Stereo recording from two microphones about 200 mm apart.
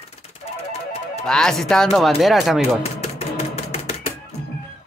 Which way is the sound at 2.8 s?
30° left (ahead or behind).